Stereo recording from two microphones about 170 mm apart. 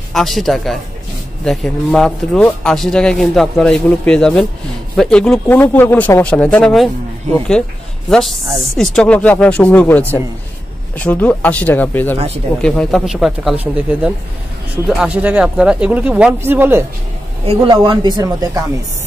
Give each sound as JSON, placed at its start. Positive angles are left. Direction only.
{"t": 0.1, "sound": "speech", "side_deg": 0}
{"t": 8.1, "sound": "speech", "side_deg": 5}
{"t": 14.9, "sound": "speech", "side_deg": -5}
{"t": 17.6, "sound": "speech", "side_deg": -25}